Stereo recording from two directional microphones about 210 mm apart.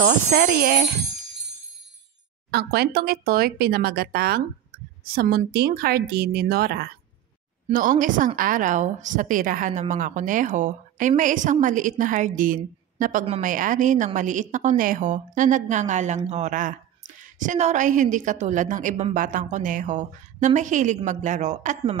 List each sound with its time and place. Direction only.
0.0 s speech: 45° right (ahead or behind)
2.5 s a woman's voice: 50° right (ahead or behind)